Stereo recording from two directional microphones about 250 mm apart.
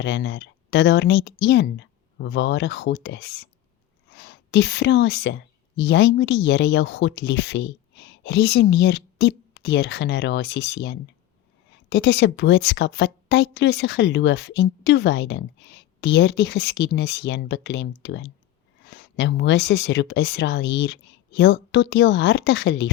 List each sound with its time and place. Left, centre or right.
0.0 s a woman's voice: left